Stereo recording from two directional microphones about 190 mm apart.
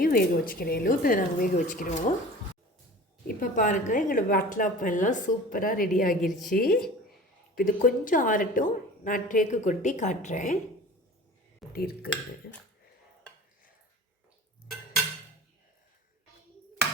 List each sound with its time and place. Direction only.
0.0 s a woman's voice: 50° left (ahead or behind)
3.2 s a woman's voice: 45° left (ahead or behind)
6.2 s a woman's voice: centre (ahead or behind)
6.5 s a woman's voice: 50° left (ahead or behind)
11.7 s a woman's voice: 55° left (ahead or behind)